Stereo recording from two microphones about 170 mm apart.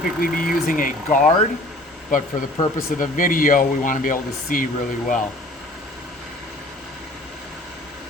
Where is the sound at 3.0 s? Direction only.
50° left (ahead or behind).